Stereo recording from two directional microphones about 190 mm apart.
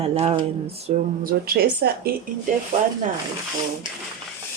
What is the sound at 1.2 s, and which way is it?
Speech, 55° right (ahead or behind).